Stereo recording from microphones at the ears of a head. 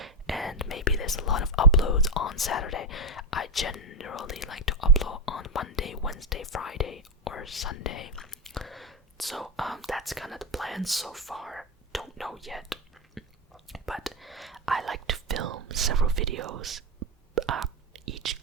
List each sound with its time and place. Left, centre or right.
0.5 s speech: left
8.7 s speech: centre
13.7 s whispering: centre
14.9 s whispering: right